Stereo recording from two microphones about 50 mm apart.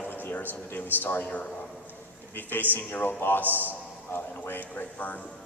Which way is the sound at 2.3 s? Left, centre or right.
Left.